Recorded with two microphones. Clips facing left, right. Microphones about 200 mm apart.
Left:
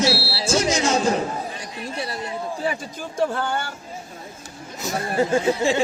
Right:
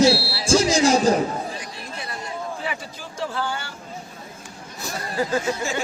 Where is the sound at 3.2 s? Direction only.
55° left (ahead or behind).